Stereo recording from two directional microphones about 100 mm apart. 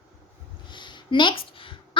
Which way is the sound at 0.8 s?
55° left (ahead or behind).